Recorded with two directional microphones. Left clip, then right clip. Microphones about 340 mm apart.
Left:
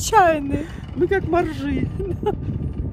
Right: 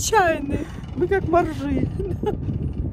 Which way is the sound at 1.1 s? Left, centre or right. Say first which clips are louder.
Right 3 dB; centre.